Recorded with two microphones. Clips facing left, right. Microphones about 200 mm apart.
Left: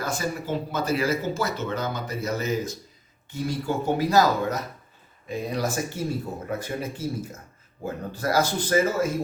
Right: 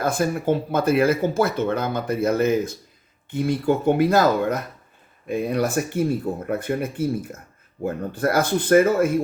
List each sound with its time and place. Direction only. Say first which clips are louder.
0.0 s speech: right 7 dB; 55° right (ahead or behind)